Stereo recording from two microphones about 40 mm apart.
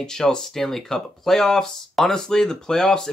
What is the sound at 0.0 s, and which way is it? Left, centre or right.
Speech, centre.